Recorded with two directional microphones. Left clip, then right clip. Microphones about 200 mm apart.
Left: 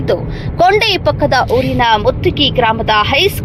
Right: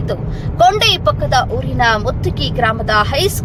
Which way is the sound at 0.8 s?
20° left (ahead or behind).